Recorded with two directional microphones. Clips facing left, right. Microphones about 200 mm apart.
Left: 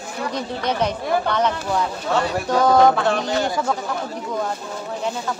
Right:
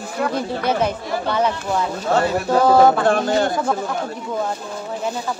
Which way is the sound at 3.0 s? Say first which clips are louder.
Right 3 dB; 50° right (ahead or behind).